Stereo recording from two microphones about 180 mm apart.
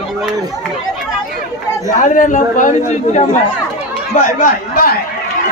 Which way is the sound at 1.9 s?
45° left (ahead or behind).